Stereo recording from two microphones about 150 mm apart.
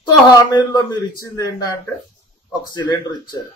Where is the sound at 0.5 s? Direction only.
25° left (ahead or behind).